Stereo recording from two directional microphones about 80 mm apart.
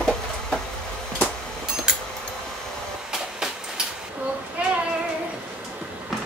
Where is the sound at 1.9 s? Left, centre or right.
Centre.